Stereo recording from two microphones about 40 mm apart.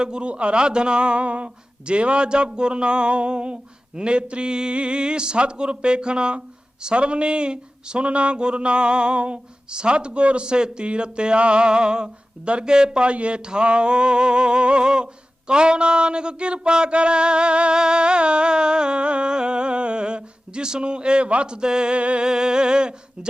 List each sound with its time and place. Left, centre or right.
0.0 s speech: right
22.3 s speech: centre